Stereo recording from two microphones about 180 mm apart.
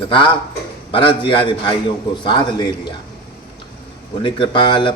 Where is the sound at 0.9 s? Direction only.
25° left (ahead or behind).